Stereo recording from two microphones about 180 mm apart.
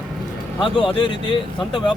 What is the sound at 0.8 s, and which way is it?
Speech, 30° left (ahead or behind).